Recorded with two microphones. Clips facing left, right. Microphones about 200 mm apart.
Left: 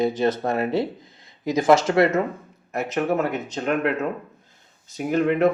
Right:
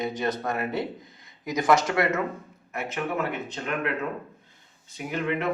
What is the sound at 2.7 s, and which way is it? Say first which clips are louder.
Speech: left 7 dB; 40° left (ahead or behind).